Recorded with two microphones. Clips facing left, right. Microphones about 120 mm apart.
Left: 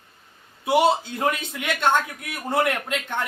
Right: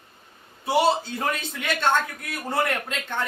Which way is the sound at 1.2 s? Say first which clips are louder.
Left 3 dB; 15° left (ahead or behind).